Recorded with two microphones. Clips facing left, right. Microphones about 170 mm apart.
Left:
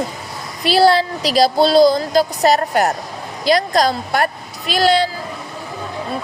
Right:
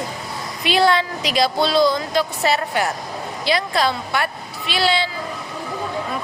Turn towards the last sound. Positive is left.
turn(degrees=45)  # may be behind; listen again after turning